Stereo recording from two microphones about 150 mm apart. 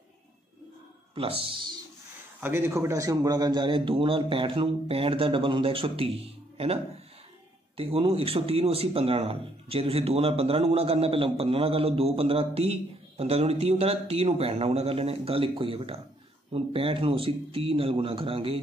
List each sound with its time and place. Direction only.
1.1 s speech: 40° right (ahead or behind)
2.4 s speech: 15° right (ahead or behind); by 18.6 s 40° right (ahead or behind)